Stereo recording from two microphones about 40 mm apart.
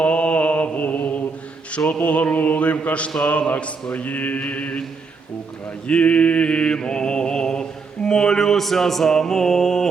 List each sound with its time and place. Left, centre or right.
0.0 s mantra: left
5.9 s mantra: left; by 9.9 s centre